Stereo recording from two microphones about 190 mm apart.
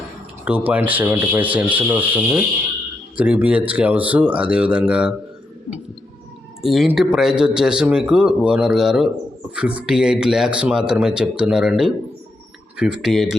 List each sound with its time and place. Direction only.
0.4 s speech: 5° right (ahead or behind)
6.6 s speech: centre (ahead or behind)